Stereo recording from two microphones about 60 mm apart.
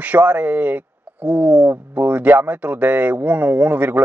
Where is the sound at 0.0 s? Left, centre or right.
Right.